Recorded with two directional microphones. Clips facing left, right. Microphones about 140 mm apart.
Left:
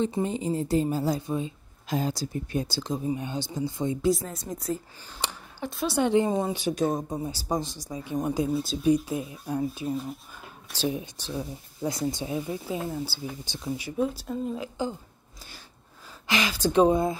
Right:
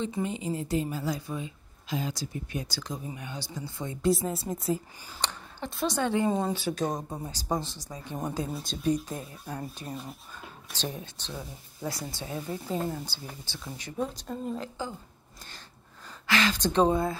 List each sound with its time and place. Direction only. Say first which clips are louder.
0.1 s a woman's voice: left 4 dB; 35° left (ahead or behind)
1.9 s speech: left 4 dB; 40° left (ahead or behind); by 4.0 s 20° left (ahead or behind)
4.3 s speech: right 2 dB; 5° right (ahead or behind)
5.9 s speech: left 5 dB; 20° left (ahead or behind)
16.3 s speech: even; 15° left (ahead or behind)